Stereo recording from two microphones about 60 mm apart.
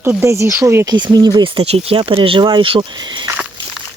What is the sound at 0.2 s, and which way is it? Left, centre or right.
Speech, right.